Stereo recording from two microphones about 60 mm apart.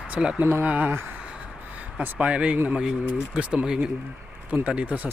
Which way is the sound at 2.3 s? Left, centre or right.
Centre.